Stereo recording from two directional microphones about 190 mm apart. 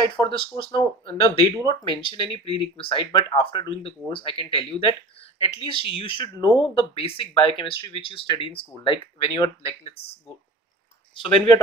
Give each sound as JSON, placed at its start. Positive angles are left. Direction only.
{"t": 0.0, "sound": "speech", "side_deg": 25}
{"t": 11.1, "sound": "speech", "side_deg": 25}